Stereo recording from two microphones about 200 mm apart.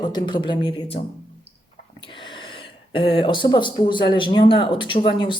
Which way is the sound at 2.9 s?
25° left (ahead or behind).